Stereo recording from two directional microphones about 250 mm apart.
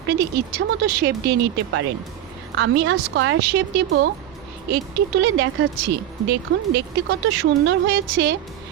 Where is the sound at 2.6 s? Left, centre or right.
Right.